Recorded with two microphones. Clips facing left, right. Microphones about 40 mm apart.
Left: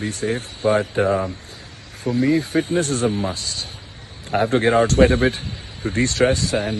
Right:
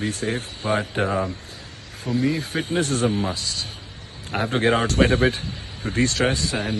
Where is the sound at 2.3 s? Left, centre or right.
Left.